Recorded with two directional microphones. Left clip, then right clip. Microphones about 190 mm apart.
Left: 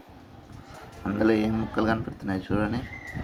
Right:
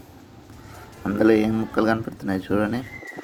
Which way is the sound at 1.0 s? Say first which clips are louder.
Right 5 dB; 30° right (ahead or behind).